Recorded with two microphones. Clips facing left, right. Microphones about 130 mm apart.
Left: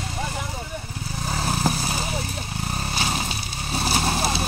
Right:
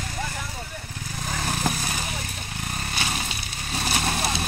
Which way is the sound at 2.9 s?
30° left (ahead or behind).